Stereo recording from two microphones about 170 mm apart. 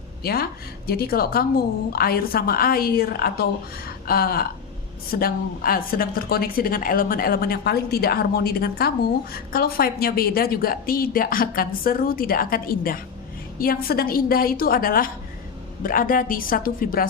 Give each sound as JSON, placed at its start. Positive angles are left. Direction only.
{"t": 0.2, "sound": "a woman's voice", "side_deg": 65}